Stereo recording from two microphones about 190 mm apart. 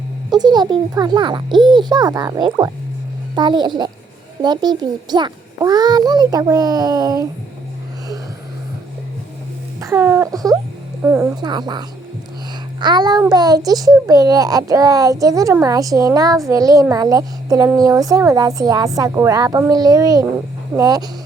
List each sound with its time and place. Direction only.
0.3 s a child's voice: 20° right (ahead or behind)
9.8 s a woman's voice: 10° right (ahead or behind)
11.3 s a child's voice: 20° right (ahead or behind)